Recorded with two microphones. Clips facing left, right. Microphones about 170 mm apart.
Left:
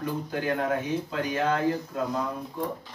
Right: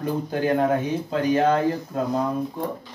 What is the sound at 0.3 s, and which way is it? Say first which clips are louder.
Speech: right 7 dB; 30° right (ahead or behind).